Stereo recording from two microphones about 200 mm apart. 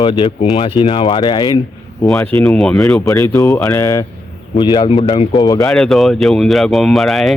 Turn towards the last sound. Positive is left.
turn(degrees=0)  # may be behind; listen again after turning